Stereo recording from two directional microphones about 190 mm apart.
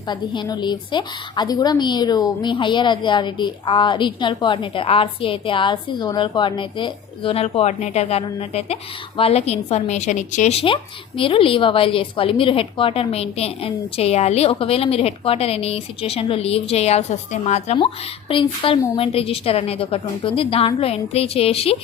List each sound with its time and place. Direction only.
0.1 s a woman's voice: 20° left (ahead or behind)